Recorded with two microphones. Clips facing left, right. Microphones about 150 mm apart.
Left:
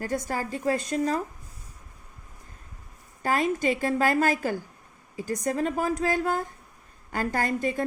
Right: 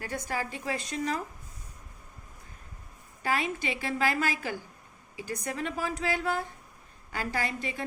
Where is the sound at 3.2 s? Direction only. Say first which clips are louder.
Left 6 dB; 45° left (ahead or behind).